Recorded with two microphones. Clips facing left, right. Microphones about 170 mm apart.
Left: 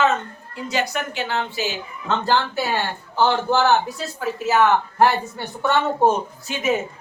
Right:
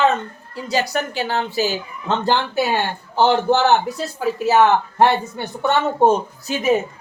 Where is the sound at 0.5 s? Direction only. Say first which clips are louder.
Right 3 dB; 35° right (ahead or behind).